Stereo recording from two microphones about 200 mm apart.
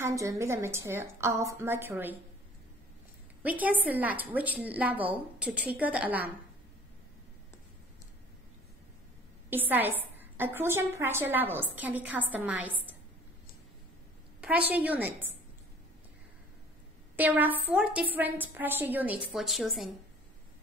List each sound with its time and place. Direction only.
0.0 s a woman's voice: 15° right (ahead or behind)
3.4 s a woman's voice: 10° right (ahead or behind)
9.5 s a woman's voice: 10° right (ahead or behind)
14.4 s a woman's voice: 10° right (ahead or behind)
17.2 s a woman's voice: 10° right (ahead or behind)